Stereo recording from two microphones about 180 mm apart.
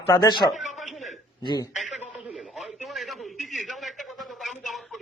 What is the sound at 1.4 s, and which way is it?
Speech, 20° left (ahead or behind).